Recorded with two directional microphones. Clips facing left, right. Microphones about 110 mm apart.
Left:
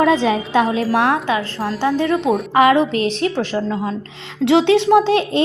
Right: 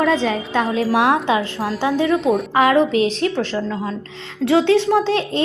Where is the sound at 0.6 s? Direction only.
Centre (ahead or behind).